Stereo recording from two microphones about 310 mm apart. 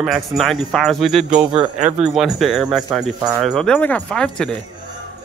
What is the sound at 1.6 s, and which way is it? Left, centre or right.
Speech, right.